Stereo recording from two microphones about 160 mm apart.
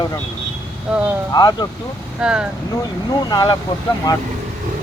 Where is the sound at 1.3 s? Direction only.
25° left (ahead or behind).